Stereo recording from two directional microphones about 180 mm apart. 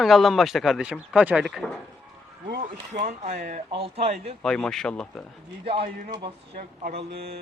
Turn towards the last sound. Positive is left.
turn(degrees=-30)  # may be behind; listen again after turning